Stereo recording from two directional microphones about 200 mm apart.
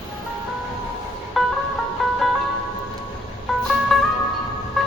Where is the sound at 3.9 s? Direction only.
Centre (ahead or behind).